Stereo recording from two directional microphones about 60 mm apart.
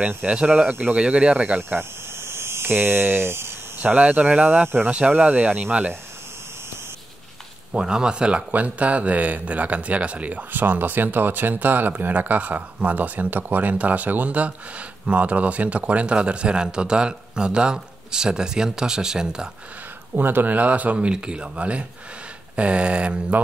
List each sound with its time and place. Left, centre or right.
0.2 s speech: centre
1.7 s a sound: right
3.7 s speech: right
7.7 s speech: centre
20.2 s speech: right